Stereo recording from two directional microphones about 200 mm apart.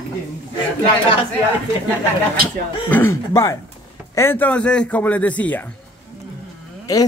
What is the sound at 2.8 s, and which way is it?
Speech, 10° left (ahead or behind).